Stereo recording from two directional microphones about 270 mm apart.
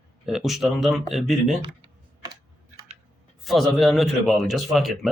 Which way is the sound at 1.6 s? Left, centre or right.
Centre.